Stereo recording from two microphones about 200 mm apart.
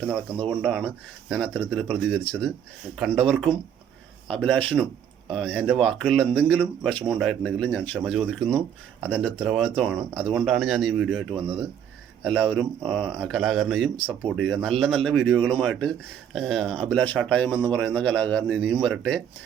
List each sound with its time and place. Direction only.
0.6 s a man's voice: centre (ahead or behind)